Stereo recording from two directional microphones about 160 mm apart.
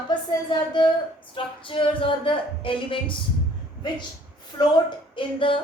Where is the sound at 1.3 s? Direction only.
30° left (ahead or behind).